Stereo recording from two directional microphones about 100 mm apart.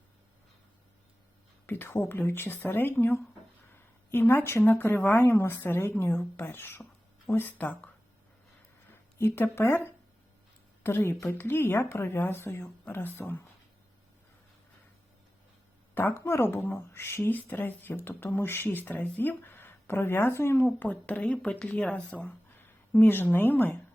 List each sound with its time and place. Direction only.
1.6 s speech: 20° left (ahead or behind)
8.9 s speech: 20° left (ahead or behind)
10.8 s speech: 20° left (ahead or behind)
16.0 s speech: 20° left (ahead or behind)
20.7 s speech: 15° left (ahead or behind)